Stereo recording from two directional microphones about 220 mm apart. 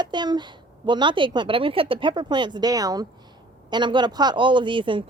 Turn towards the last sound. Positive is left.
turn(degrees=-20)  # may be behind; listen again after turning